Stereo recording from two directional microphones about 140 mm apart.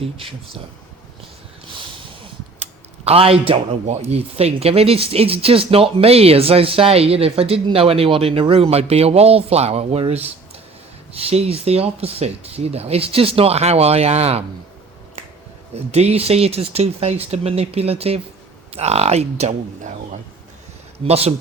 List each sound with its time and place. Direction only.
0.0 s speech: 40° right (ahead or behind)
1.6 s speech: 35° right (ahead or behind)
11.3 s speech: 45° right (ahead or behind)
15.7 s speech: 50° right (ahead or behind)
21.0 s speech: 45° right (ahead or behind)